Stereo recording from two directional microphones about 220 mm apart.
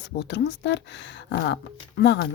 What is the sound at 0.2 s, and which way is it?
Speech, 50° left (ahead or behind).